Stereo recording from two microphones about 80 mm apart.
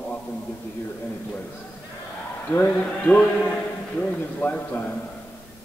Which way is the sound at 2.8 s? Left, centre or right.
Centre.